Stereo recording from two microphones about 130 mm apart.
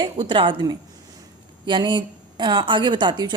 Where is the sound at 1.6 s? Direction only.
35° right (ahead or behind).